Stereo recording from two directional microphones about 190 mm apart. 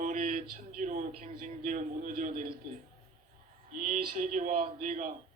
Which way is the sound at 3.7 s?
45° right (ahead or behind).